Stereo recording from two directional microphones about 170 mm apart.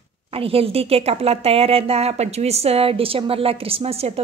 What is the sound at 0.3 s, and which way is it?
A woman's voice, 35° right (ahead or behind).